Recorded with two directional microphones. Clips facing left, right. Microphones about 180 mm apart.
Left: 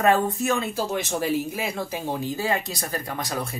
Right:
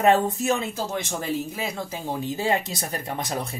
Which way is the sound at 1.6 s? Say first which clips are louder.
Left 2 dB; 10° left (ahead or behind).